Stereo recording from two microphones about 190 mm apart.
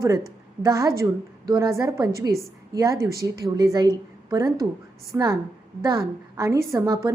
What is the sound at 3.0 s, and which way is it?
Speech, 55° right (ahead or behind).